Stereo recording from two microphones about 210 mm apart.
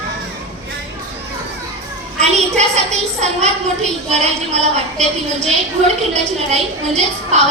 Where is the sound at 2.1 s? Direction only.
30° right (ahead or behind).